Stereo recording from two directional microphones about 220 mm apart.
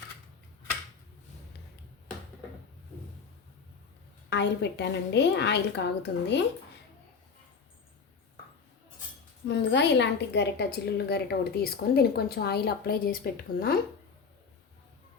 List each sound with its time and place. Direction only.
4.3 s speech: 50° left (ahead or behind)
9.5 s speech: 50° left (ahead or behind)